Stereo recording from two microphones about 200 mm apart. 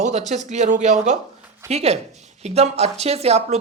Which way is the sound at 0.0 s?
35° right (ahead or behind).